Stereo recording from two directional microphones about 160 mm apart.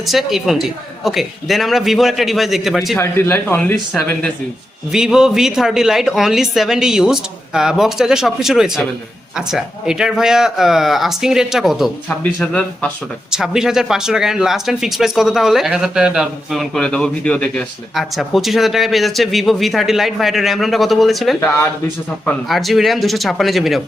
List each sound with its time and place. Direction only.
0.1 s speech: centre (ahead or behind)
3.0 s speech: 15° left (ahead or behind)
4.9 s speech: 5° right (ahead or behind)
13.3 s speech: 5° right (ahead or behind)
21.4 s speech: 15° left (ahead or behind)
22.4 s speech: centre (ahead or behind)